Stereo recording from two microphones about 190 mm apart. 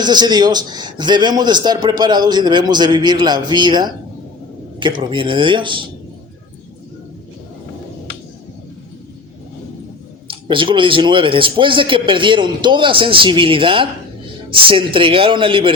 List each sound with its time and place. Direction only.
0.0 s a man's voice: 20° right (ahead or behind)
10.2 s a man's voice: 25° right (ahead or behind)